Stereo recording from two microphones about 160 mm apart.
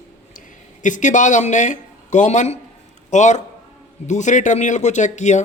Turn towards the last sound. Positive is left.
turn(degrees=45)  # may be behind; listen again after turning